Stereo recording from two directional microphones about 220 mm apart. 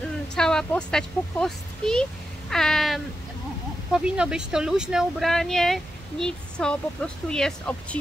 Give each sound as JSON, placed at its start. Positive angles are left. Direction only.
{"t": 0.0, "sound": "speech", "side_deg": 5}
{"t": 2.5, "sound": "cat", "side_deg": 0}
{"t": 3.9, "sound": "speech", "side_deg": -5}